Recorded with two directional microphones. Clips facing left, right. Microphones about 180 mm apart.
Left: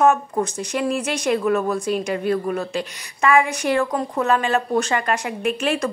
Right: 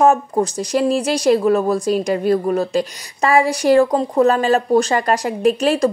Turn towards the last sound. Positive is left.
turn(degrees=-35)  # may be behind; listen again after turning